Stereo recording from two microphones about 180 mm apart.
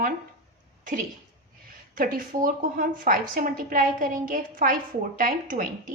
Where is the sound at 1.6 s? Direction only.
50° right (ahead or behind).